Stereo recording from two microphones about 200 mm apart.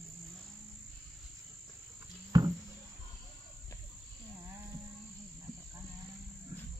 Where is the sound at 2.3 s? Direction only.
20° right (ahead or behind).